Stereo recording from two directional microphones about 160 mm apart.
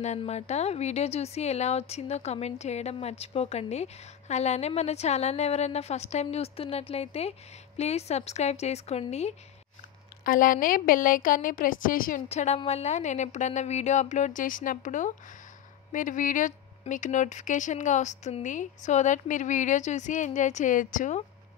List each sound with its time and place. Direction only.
0.2 s speech: 45° left (ahead or behind)
10.2 s a woman's voice: 60° left (ahead or behind)
12.3 s a woman's voice: 45° left (ahead or behind)